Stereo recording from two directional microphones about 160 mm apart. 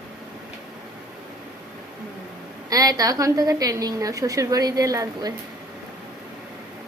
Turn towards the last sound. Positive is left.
turn(degrees=-20)  # may be behind; listen again after turning